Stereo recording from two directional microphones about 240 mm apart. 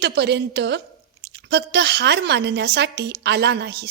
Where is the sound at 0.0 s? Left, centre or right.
Right.